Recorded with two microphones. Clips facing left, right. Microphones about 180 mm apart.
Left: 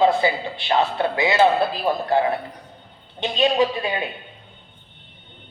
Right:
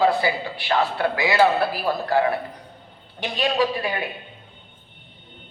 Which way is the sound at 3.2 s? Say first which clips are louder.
Left 3 dB; 20° left (ahead or behind).